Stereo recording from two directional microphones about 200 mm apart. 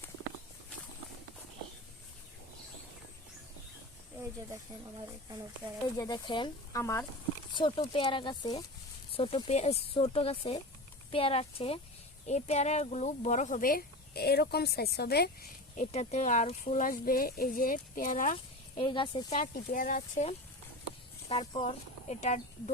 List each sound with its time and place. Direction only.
5.0 s speech: 20° right (ahead or behind)
6.0 s speech: 20° left (ahead or behind)
7.5 s speech: 25° left (ahead or behind); by 18.3 s 40° left (ahead or behind)
18.8 s speech: 25° left (ahead or behind)
19.4 s speech: 45° left (ahead or behind)
21.2 s speech: 30° left (ahead or behind)